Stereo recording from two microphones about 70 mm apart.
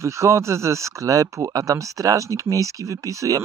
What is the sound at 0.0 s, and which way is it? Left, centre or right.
Speech, right.